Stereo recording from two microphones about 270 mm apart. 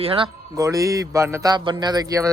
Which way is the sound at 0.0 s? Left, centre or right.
Centre.